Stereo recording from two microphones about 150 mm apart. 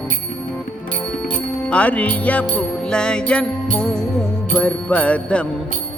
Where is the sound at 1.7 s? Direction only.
10° left (ahead or behind).